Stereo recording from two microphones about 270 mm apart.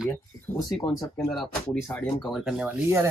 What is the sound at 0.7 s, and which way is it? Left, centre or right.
Speech, centre.